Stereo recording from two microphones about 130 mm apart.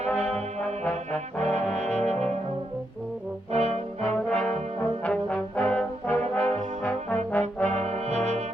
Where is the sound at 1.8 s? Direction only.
60° right (ahead or behind).